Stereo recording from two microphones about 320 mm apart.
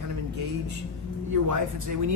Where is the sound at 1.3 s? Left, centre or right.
Right.